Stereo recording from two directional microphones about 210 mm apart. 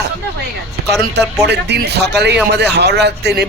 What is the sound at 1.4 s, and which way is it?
A man's voice, 50° right (ahead or behind).